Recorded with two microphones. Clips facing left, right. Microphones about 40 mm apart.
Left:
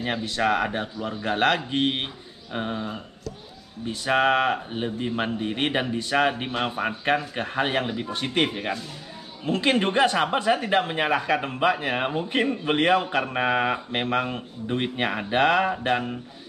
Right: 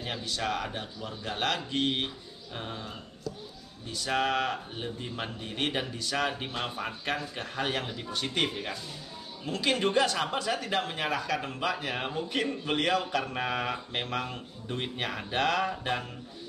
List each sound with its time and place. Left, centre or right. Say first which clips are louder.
0.0 s speech: left 8 dB; left